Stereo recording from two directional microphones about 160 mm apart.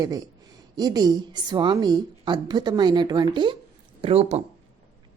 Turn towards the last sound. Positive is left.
turn(degrees=-40)  # may be behind; listen again after turning